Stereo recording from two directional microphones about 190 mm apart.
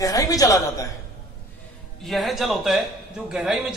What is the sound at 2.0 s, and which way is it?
A man's voice, centre (ahead or behind).